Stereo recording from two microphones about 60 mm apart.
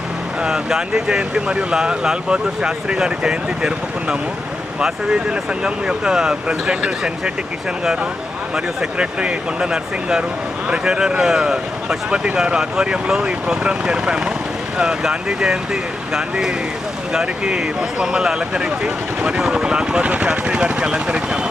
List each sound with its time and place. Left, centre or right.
0.4 s speech: centre
4.8 s speech: centre
8.5 s speech: centre